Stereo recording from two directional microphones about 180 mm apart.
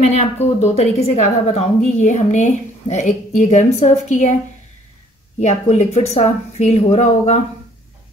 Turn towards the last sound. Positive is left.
turn(degrees=40)  # may be behind; listen again after turning